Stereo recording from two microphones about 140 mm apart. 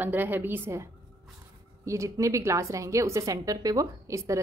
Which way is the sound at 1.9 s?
20° right (ahead or behind).